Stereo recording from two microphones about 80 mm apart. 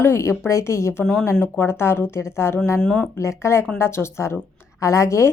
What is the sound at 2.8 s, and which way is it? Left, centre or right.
Speech, centre.